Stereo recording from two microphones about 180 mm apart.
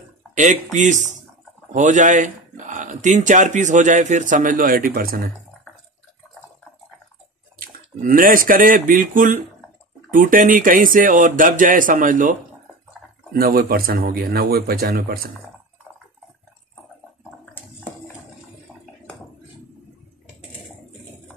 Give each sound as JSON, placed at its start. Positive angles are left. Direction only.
{"t": 0.3, "sound": "speech", "side_deg": -45}
{"t": 7.5, "sound": "speech", "side_deg": -50}